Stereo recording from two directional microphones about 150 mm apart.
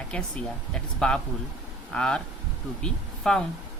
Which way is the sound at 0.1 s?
5° left (ahead or behind).